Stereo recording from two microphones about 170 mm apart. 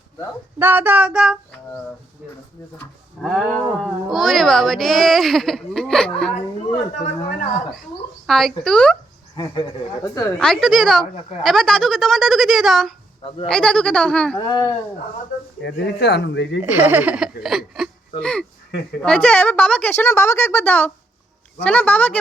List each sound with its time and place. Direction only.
0.6 s child singing: 10° right (ahead or behind)
3.2 s speech: centre (ahead or behind)
8.3 s speech: centre (ahead or behind)
9.3 s speech: 25° left (ahead or behind)
10.3 s speech: 5° left (ahead or behind)
13.2 s speech: 35° left (ahead or behind)
13.5 s speech: 5° left (ahead or behind)
14.3 s speech: 20° left (ahead or behind)
15.6 s speech: 90° left
16.6 s a woman's voice: 10° right (ahead or behind); by 22.2 s 10° left (ahead or behind)